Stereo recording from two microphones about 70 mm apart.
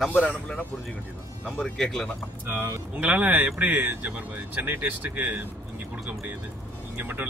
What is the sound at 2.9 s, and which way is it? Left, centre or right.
A man's voice, right.